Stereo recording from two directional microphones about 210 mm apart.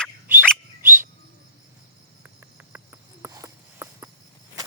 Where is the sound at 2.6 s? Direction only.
10° right (ahead or behind).